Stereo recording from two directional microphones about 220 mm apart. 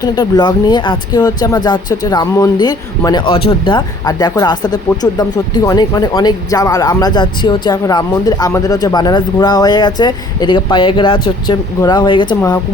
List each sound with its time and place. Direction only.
0.0 s speech: 20° left (ahead or behind)